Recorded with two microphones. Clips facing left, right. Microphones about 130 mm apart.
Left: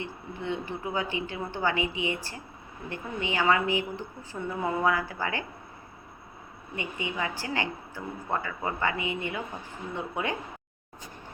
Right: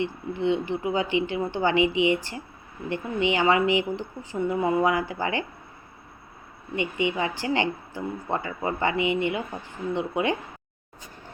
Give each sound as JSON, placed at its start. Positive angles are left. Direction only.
{"t": 0.0, "sound": "speech", "side_deg": -20}
{"t": 6.7, "sound": "speech", "side_deg": -20}